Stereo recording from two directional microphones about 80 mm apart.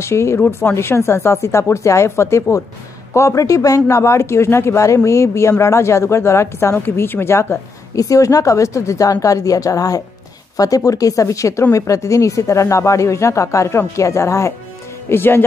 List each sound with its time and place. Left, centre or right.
0.0 s speech: left
8.0 s a woman's voice: left